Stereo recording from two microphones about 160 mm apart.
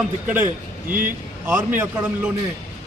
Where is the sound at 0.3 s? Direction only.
10° right (ahead or behind).